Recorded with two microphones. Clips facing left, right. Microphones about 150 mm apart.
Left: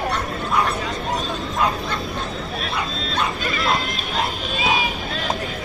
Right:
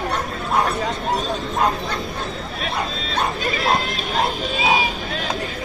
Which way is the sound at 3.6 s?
55° right (ahead or behind).